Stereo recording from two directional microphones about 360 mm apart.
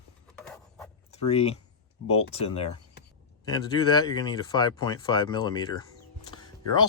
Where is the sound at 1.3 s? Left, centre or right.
Centre.